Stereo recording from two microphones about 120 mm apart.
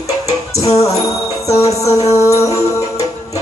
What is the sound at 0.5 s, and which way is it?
Music, 25° left (ahead or behind).